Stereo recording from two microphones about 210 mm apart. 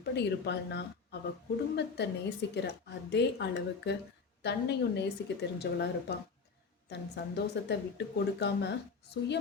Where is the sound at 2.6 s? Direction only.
55° left (ahead or behind).